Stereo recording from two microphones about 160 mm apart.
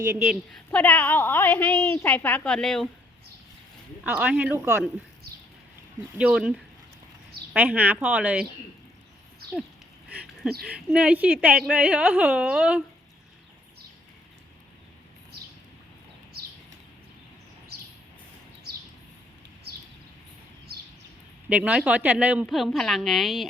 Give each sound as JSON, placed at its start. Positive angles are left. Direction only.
{"t": 0.0, "sound": "a woman's voice", "side_deg": -20}
{"t": 0.3, "sound": "a woman's voice", "side_deg": 5}
{"t": 4.0, "sound": "speech", "side_deg": -5}
{"t": 6.1, "sound": "speech", "side_deg": -5}
{"t": 7.5, "sound": "speech", "side_deg": -10}
{"t": 10.6, "sound": "speech", "side_deg": -5}
{"t": 21.5, "sound": "a woman's voice", "side_deg": -10}